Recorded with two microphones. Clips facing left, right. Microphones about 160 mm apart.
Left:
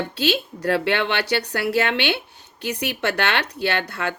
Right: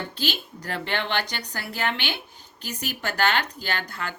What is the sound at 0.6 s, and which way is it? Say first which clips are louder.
Speech: left 8 dB; 65° left (ahead or behind).